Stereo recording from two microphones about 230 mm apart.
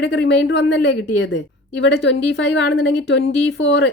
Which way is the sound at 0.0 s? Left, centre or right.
Left.